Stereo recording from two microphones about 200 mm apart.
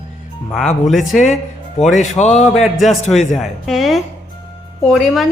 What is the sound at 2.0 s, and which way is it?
Speech, 35° left (ahead or behind).